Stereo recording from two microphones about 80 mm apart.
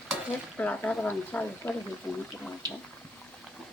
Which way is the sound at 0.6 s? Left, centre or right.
Centre.